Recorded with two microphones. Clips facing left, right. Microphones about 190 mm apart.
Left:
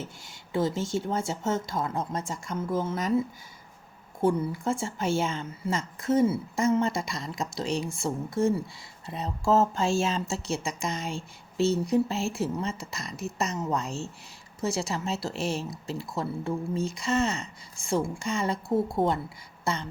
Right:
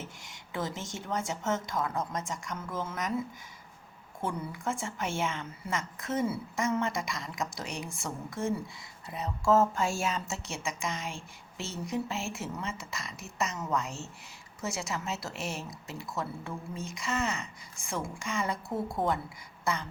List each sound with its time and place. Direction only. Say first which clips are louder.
0.3 s a woman's voice: left 8 dB; 30° left (ahead or behind)
4.2 s a woman's voice: left 9 dB; 30° left (ahead or behind)
19.6 s a sound: left 2 dB; 30° left (ahead or behind)